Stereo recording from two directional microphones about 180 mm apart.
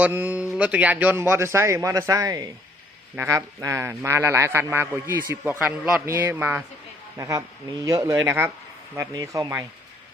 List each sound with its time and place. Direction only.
0.0 s a man's voice: 10° right (ahead or behind)